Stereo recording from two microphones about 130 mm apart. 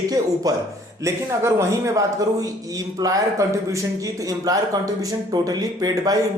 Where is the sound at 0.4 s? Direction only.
25° right (ahead or behind).